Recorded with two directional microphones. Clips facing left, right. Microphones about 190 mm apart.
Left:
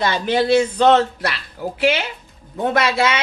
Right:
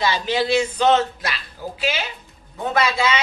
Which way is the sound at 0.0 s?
55° left (ahead or behind).